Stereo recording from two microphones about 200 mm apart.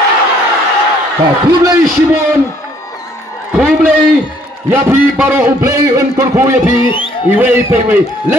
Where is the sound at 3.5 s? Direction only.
5° right (ahead or behind).